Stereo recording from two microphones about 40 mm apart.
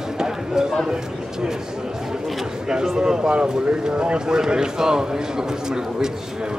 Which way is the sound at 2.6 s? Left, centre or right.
Centre.